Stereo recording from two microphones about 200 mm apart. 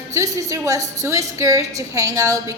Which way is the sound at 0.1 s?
15° right (ahead or behind).